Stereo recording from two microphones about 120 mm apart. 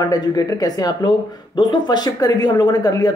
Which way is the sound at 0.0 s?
30° left (ahead or behind).